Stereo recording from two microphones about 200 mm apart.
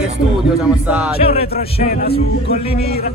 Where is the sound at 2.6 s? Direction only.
30° left (ahead or behind).